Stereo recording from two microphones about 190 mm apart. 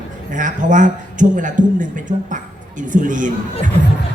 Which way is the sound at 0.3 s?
40° right (ahead or behind).